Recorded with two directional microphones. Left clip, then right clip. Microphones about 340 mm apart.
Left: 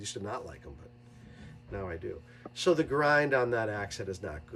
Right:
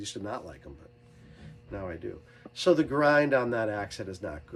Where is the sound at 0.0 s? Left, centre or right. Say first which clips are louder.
Right 1 dB; centre.